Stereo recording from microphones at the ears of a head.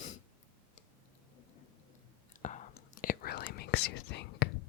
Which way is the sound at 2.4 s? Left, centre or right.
Left.